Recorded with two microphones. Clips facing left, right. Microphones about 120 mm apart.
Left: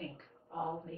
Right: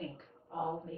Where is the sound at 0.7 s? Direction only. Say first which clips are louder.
Right 2 dB; 15° right (ahead or behind).